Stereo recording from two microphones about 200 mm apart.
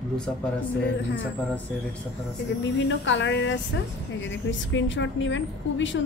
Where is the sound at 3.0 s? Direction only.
70° left (ahead or behind).